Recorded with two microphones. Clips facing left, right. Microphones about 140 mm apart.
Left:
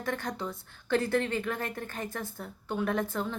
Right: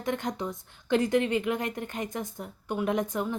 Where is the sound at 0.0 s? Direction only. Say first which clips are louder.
Right 3 dB; 20° right (ahead or behind).